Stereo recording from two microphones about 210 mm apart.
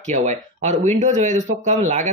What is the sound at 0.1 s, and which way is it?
Speech, 35° right (ahead or behind).